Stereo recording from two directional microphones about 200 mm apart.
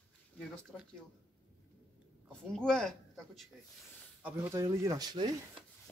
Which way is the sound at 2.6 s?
5° left (ahead or behind).